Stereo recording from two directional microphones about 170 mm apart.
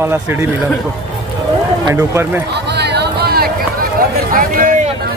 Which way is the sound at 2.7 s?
75° right (ahead or behind).